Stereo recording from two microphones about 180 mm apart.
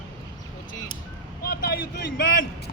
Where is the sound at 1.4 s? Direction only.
60° left (ahead or behind).